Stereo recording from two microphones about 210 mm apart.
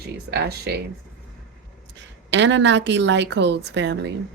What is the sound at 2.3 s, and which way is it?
A woman's voice, 60° right (ahead or behind).